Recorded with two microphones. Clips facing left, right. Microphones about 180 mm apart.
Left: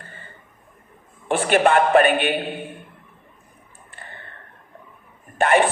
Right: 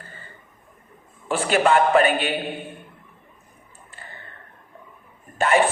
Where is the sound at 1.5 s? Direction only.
60° left (ahead or behind).